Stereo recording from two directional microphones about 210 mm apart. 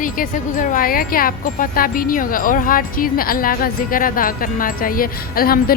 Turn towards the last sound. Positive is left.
turn(degrees=45)  # may be behind; listen again after turning